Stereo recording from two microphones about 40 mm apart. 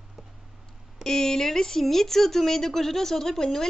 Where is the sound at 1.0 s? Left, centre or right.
Centre.